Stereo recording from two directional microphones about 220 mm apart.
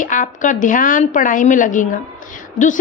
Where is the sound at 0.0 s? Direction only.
35° left (ahead or behind).